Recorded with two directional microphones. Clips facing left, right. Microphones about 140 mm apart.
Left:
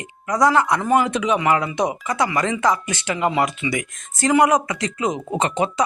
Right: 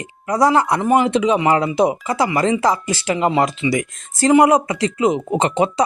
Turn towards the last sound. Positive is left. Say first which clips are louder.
# right 3 dB
turn(degrees=-30)  # may be behind; listen again after turning